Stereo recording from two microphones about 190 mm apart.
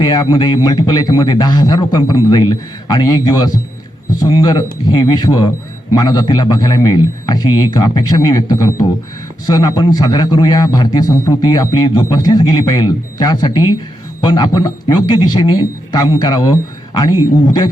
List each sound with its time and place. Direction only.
0.0 s a man's voice: 25° left (ahead or behind)